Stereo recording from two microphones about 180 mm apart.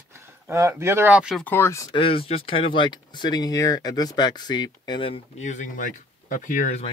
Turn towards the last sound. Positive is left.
turn(degrees=45)  # may be behind; listen again after turning